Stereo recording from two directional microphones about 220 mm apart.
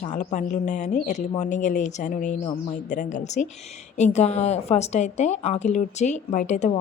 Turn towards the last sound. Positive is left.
turn(degrees=30)  # may be behind; listen again after turning